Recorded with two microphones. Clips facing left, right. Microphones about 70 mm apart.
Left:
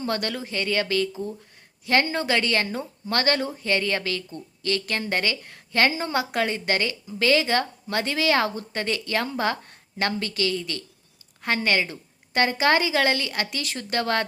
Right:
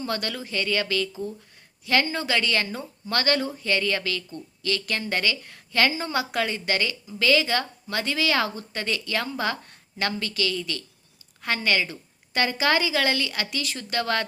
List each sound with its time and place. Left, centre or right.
0.0 s a woman's voice: left